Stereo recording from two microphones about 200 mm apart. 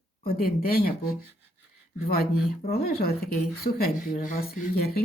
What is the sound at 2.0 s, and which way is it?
Speech, 50° left (ahead or behind).